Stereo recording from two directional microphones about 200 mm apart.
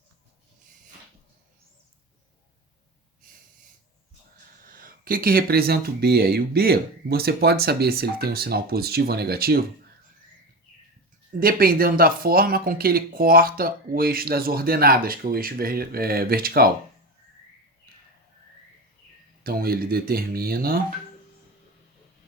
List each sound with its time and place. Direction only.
4.6 s speech: 45° right (ahead or behind)
11.3 s speech: 45° right (ahead or behind)
19.4 s speech: 50° right (ahead or behind)